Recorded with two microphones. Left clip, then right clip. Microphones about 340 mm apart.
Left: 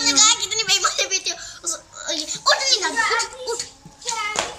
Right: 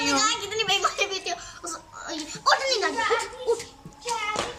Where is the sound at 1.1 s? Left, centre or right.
Centre.